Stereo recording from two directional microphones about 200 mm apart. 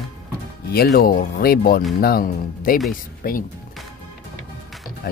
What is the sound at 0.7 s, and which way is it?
Speech, 50° left (ahead or behind).